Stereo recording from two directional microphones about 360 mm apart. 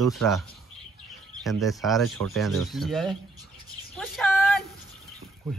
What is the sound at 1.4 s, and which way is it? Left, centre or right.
Speech, centre.